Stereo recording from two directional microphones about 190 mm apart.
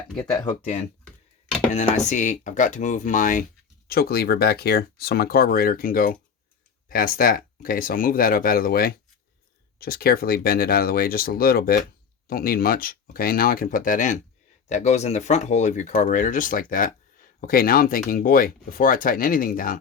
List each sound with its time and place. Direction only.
0.6 s speech: 35° left (ahead or behind)